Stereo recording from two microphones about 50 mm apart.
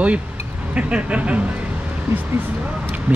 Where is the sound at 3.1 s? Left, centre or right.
Right.